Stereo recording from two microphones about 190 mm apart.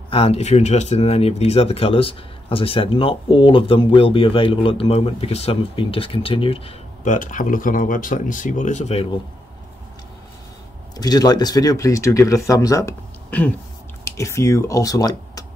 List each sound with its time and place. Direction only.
0.1 s speech: 30° left (ahead or behind)
7.1 s speech: 45° left (ahead or behind)
11.0 s speech: 20° left (ahead or behind)